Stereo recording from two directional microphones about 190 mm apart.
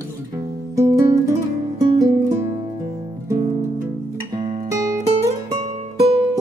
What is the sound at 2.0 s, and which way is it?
Music, 15° right (ahead or behind).